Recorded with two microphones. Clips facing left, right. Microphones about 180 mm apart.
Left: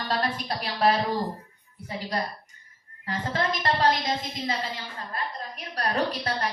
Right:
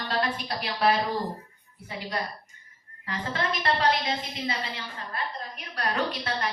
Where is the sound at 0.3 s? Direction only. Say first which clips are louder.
Left 1 dB; 40° left (ahead or behind).